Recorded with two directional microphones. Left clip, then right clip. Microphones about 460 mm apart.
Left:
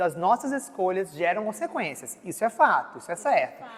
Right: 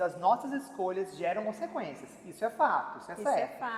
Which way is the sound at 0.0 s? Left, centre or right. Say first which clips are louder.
Left 5 dB; left.